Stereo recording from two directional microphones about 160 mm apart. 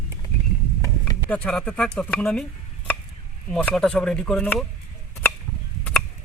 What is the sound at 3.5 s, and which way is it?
Speech, centre (ahead or behind).